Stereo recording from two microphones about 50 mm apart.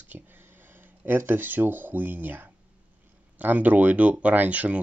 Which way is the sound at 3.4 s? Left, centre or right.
Right.